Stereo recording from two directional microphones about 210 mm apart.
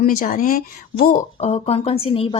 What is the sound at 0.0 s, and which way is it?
A woman's voice, 45° left (ahead or behind).